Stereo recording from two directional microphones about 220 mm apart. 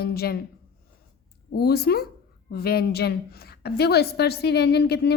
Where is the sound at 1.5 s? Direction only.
45° left (ahead or behind).